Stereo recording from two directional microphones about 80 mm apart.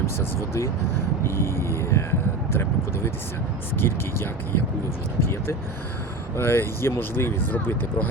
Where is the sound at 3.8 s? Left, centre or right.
Left.